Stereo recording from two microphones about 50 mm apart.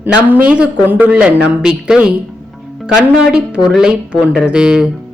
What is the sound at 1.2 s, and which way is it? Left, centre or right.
Speech, centre.